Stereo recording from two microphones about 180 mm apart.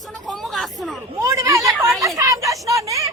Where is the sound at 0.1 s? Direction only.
Centre (ahead or behind).